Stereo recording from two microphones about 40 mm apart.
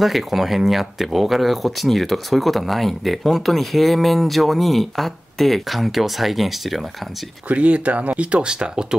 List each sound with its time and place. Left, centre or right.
0.0 s speech: centre
7.4 s speech: right
8.3 s speech: right